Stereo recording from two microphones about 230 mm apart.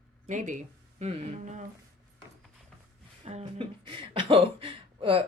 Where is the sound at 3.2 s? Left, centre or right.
Right.